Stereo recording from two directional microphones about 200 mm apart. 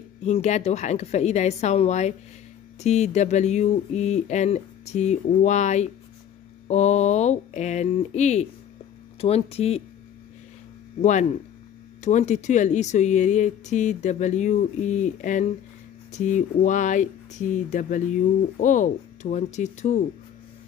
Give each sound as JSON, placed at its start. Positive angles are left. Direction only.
{"t": 0.2, "sound": "speech", "side_deg": 35}
{"t": 11.0, "sound": "speech", "side_deg": 35}